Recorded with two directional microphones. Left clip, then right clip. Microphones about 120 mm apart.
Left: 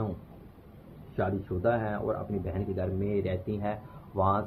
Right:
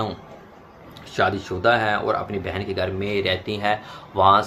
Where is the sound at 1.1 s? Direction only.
25° right (ahead or behind).